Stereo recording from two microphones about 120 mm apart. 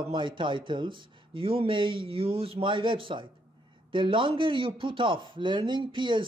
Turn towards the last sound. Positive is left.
turn(degrees=-40)  # may be behind; listen again after turning